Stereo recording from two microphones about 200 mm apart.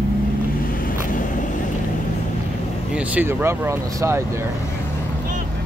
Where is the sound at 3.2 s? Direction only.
10° right (ahead or behind).